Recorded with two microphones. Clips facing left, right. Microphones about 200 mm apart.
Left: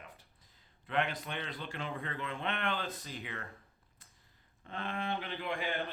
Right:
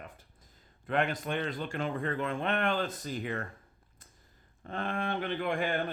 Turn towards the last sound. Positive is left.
turn(degrees=-50)  # may be behind; listen again after turning